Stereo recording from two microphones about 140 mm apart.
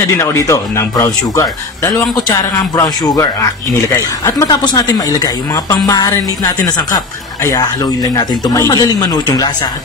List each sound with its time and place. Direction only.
0.1 s speech: 20° left (ahead or behind)